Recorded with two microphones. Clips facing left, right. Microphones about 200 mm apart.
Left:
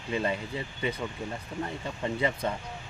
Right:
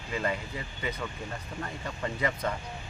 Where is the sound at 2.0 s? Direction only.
25° left (ahead or behind).